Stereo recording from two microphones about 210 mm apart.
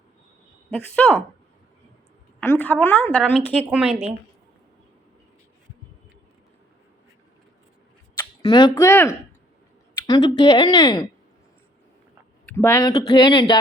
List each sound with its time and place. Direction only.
0.7 s a woman's voice: 5° left (ahead or behind)
2.5 s a woman's voice: 10° left (ahead or behind)
8.2 s speech: 20° left (ahead or behind)
12.5 s speech: 10° left (ahead or behind)